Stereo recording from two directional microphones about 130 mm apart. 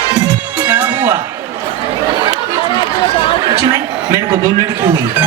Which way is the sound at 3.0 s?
45° left (ahead or behind).